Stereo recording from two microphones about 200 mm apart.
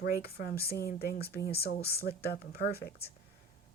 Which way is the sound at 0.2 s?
50° left (ahead or behind).